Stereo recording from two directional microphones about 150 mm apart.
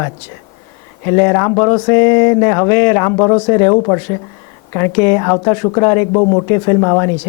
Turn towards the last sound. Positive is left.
turn(degrees=20)  # may be behind; listen again after turning